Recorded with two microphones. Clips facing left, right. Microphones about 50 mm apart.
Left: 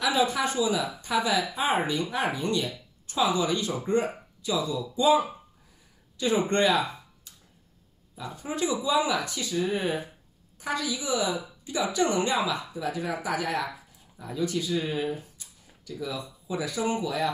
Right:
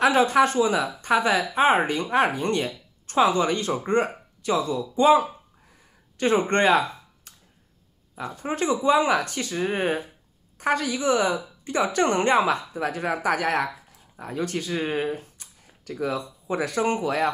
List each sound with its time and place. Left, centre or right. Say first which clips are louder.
0.0 s speech: right 7 dB; right
8.2 s speech: right 3 dB; right